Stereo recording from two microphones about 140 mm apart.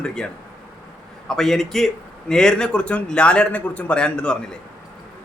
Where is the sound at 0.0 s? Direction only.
5° left (ahead or behind).